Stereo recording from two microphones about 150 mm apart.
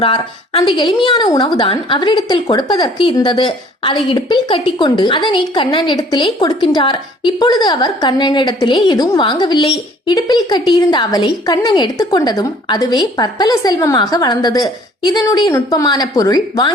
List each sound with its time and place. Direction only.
0.0 s a woman's voice: 35° left (ahead or behind)